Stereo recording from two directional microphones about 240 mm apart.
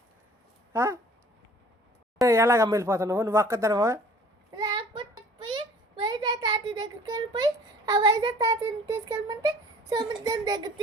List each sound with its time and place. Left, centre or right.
0.7 s speech: centre
2.1 s speech: centre
4.5 s a sound: centre
9.9 s speech: centre